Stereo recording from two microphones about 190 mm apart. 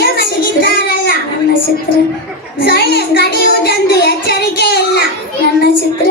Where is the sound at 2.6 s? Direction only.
60° left (ahead or behind).